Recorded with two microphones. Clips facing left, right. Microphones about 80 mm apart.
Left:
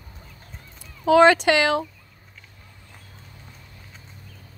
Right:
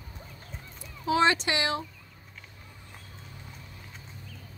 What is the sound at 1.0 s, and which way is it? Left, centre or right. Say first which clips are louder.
Speech: left 10 dB; left.